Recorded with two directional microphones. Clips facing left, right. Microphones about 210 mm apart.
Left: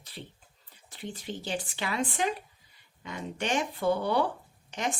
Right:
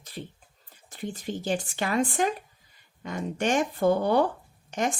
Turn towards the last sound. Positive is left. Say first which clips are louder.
# right 5 dB
turn(degrees=-45)  # may be behind; listen again after turning